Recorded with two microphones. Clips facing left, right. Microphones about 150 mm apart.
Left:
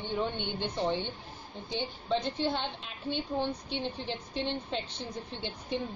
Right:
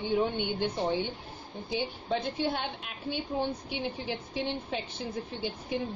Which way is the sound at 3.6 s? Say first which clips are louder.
Right 1 dB; 10° right (ahead or behind).